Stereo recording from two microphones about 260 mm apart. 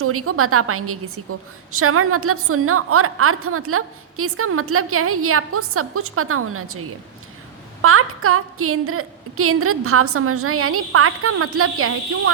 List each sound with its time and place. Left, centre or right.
0.0 s a woman's voice: right